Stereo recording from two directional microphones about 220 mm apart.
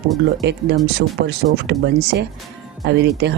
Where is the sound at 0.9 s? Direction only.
45° right (ahead or behind).